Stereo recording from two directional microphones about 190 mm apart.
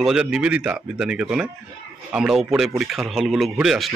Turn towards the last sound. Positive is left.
turn(degrees=0)  # may be behind; listen again after turning